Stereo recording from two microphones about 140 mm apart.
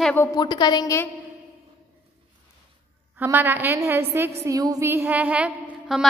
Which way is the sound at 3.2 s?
15° right (ahead or behind).